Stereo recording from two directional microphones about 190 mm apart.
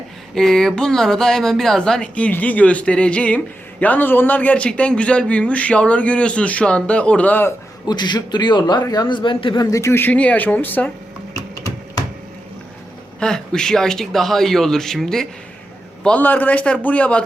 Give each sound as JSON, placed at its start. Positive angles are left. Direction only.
{"t": 0.3, "sound": "speech", "side_deg": 5}
{"t": 7.9, "sound": "a man's voice", "side_deg": 20}
{"t": 13.1, "sound": "speech", "side_deg": 5}